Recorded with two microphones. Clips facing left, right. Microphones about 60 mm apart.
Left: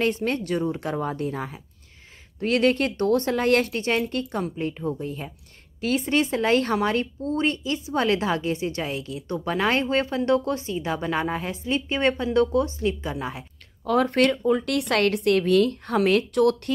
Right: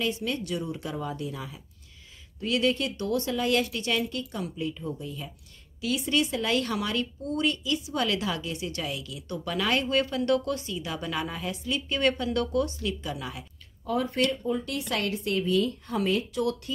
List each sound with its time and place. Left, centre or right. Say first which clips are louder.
0.0 s a woman's voice: left 6 dB; left
13.8 s speech: left 6 dB; left